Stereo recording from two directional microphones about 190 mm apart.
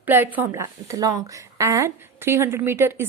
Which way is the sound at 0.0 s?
10° right (ahead or behind).